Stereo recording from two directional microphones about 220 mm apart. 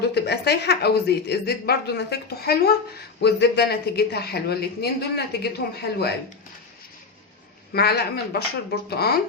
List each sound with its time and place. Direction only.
0.1 s a woman's voice: 50° left (ahead or behind)
7.7 s a woman's voice: 45° left (ahead or behind)